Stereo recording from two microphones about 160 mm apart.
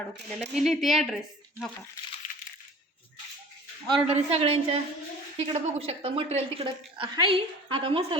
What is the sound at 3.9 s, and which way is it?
A woman's voice, 35° right (ahead or behind).